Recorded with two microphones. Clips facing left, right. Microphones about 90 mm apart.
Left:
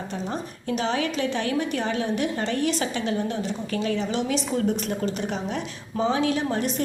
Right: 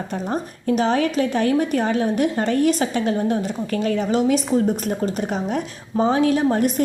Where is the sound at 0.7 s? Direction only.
45° right (ahead or behind).